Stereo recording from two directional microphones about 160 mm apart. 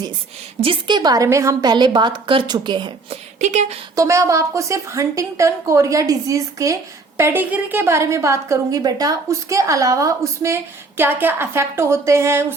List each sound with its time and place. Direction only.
0.6 s a woman's voice: 30° right (ahead or behind)
3.4 s speech: 45° right (ahead or behind)
3.9 s a woman's voice: 20° right (ahead or behind)